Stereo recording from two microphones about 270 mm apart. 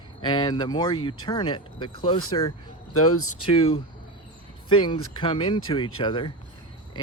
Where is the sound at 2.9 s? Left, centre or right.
Left.